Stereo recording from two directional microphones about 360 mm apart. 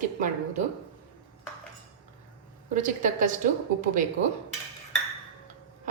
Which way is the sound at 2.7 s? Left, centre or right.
Right.